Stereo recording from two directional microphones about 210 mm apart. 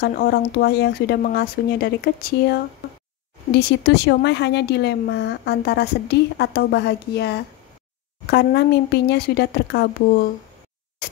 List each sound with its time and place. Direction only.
0.0 s a woman's voice: 45° left (ahead or behind)